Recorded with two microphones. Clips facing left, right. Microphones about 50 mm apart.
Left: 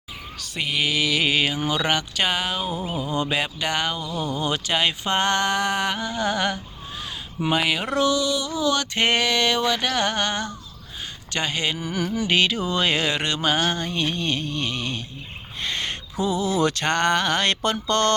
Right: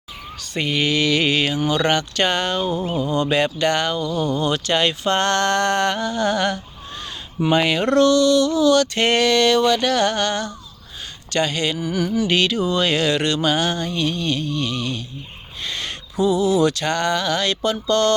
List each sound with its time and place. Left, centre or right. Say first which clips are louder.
0.3 s speech: right 4 dB; centre
3.2 s mantra: right 6 dB; centre
11.8 s music: right 5 dB; left
12.3 s mantra: left 1 dB; centre
15.6 s a sound: left 1 dB; left